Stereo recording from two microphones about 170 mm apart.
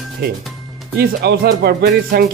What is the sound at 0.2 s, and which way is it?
Speech, 65° right (ahead or behind).